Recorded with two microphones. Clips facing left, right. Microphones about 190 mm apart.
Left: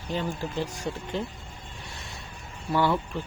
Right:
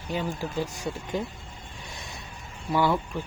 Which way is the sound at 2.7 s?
10° right (ahead or behind).